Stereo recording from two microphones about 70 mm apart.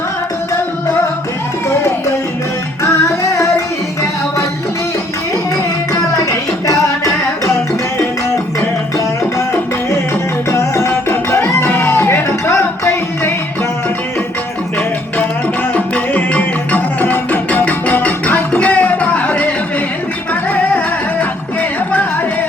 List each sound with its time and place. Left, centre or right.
6.7 s music: left
10.5 s music: left
15.7 s music: left